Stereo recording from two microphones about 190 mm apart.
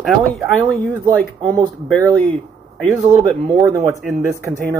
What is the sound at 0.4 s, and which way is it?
Speech, 10° right (ahead or behind).